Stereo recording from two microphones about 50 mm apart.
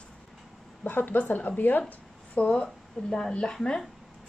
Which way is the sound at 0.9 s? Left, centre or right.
Left.